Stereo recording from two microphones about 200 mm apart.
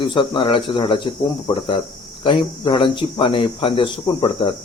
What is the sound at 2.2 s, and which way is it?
Speech, 25° left (ahead or behind).